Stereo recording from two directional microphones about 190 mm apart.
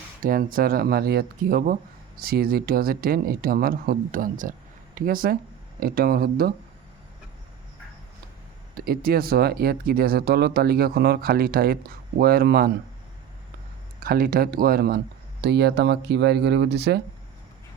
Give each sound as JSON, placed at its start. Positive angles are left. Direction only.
{"t": 0.2, "sound": "speech", "side_deg": -50}
{"t": 8.7, "sound": "speech", "side_deg": -50}
{"t": 14.0, "sound": "speech", "side_deg": -50}